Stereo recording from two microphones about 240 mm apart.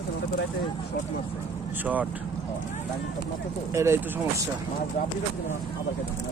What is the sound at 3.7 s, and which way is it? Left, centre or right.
Speech, centre.